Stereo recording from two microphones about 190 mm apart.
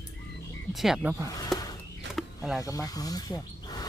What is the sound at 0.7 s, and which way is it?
Speech, centre (ahead or behind).